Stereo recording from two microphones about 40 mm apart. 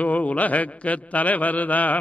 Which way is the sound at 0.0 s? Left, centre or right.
Left.